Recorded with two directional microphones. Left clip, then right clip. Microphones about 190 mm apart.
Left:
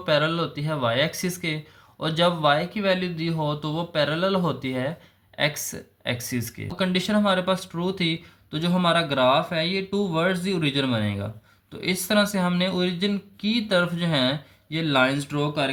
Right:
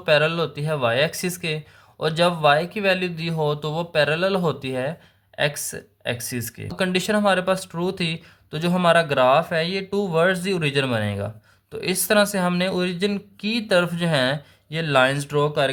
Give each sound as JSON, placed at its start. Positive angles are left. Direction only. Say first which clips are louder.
{"t": 0.0, "sound": "speech", "louder": "right 4 dB", "side_deg": -30}